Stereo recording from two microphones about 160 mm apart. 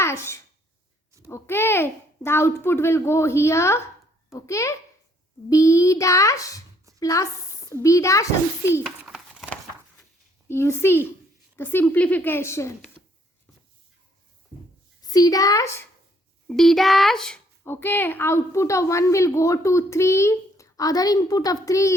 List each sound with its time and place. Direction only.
0.0 s a sound: 15° left (ahead or behind)
1.3 s a child's voice: 15° left (ahead or behind)
8.8 s a sound: 5° right (ahead or behind)
10.5 s a child's voice: 15° left (ahead or behind)
15.1 s a woman's voice: 20° left (ahead or behind)
16.5 s speech: centre (ahead or behind)
17.6 s a woman's voice: 15° left (ahead or behind)